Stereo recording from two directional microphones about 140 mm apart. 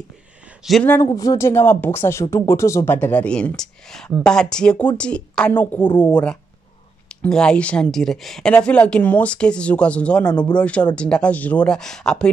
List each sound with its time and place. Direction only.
0.6 s speech: 5° right (ahead or behind)
1.0 s a woman's voice: 25° left (ahead or behind); by 12.3 s 5° left (ahead or behind)